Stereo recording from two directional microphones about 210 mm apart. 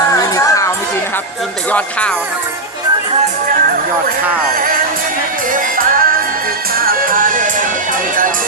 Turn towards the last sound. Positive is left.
turn(degrees=-40)  # may be behind; listen again after turning